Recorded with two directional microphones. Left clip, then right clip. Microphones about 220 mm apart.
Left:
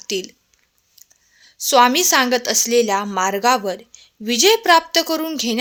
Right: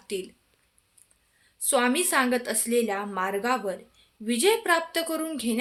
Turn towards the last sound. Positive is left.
turn(degrees=40)  # may be behind; listen again after turning